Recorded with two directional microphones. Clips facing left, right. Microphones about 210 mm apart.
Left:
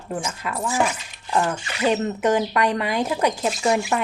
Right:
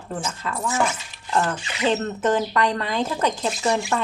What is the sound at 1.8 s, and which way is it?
Speech, 10° left (ahead or behind).